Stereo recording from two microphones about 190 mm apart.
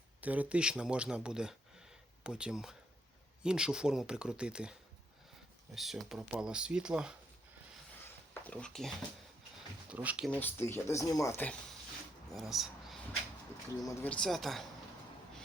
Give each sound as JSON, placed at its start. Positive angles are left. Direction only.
{"t": 0.2, "sound": "speech", "side_deg": -5}
{"t": 5.7, "sound": "speech", "side_deg": 0}
{"t": 8.0, "sound": "a sound", "side_deg": 10}
{"t": 9.9, "sound": "speech", "side_deg": -5}
{"t": 10.2, "sound": "speech", "side_deg": 10}
{"t": 12.3, "sound": "speech", "side_deg": 0}